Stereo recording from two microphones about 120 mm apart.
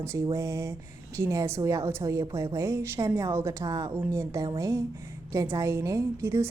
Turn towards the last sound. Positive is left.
turn(degrees=-20)  # may be behind; listen again after turning